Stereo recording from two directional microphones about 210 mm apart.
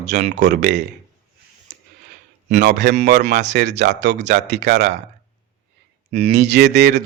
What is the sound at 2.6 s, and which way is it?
Speech, 55° right (ahead or behind).